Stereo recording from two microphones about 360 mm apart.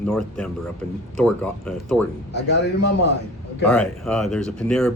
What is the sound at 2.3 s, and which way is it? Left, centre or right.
Speech, left.